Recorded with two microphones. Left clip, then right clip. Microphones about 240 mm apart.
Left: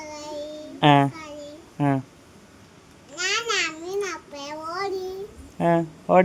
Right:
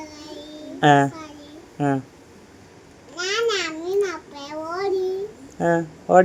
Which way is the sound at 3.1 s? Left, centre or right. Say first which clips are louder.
Right 2 dB; centre.